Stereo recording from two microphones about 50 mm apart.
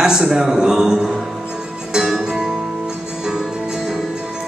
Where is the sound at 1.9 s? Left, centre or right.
Centre.